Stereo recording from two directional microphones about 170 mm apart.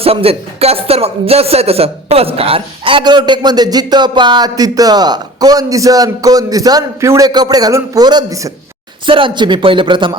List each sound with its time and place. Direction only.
0.0 s speech: 35° right (ahead or behind); by 8.5 s 20° right (ahead or behind)
9.0 s speech: 30° right (ahead or behind)